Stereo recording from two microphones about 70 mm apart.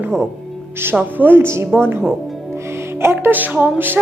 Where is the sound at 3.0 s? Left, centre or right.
Right.